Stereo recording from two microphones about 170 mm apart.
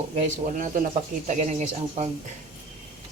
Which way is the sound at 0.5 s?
50° right (ahead or behind).